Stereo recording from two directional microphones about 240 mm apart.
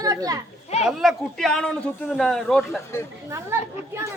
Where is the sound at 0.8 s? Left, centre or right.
Centre.